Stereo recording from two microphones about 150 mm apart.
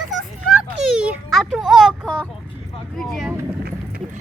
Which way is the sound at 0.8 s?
5° right (ahead or behind).